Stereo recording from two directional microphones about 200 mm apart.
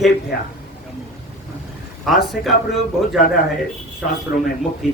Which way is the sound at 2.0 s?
Centre (ahead or behind).